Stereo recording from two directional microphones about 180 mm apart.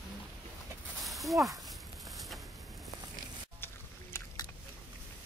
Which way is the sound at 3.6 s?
15° left (ahead or behind).